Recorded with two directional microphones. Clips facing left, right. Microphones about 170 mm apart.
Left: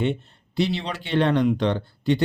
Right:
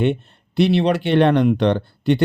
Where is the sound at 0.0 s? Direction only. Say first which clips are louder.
Right 5 dB; 65° right (ahead or behind).